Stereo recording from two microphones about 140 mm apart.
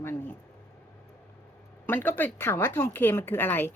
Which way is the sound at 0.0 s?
15° left (ahead or behind).